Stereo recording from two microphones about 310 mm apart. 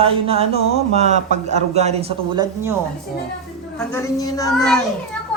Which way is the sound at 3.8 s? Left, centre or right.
Centre.